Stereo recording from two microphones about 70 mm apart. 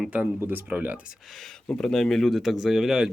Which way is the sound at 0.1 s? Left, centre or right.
Right.